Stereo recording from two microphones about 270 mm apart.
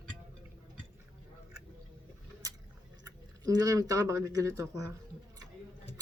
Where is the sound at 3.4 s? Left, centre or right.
Centre.